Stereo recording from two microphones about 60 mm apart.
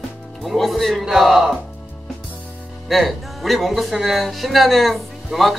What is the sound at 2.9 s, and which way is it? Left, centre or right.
Speech, centre.